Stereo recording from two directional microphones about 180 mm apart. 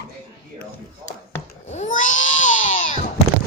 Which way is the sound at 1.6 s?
40° left (ahead or behind).